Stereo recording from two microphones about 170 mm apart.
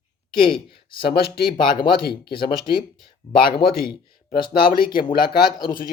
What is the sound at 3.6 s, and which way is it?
Speech, 30° left (ahead or behind).